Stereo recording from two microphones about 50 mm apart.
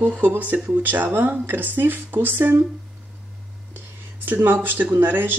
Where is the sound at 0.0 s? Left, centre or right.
Right.